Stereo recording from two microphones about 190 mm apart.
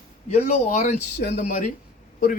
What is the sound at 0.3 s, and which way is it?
Speech, 35° left (ahead or behind).